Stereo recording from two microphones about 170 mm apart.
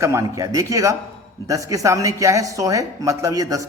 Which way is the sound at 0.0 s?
15° right (ahead or behind).